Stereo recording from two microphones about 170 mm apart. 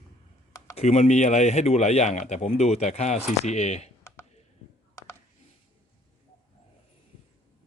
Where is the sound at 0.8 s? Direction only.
40° left (ahead or behind).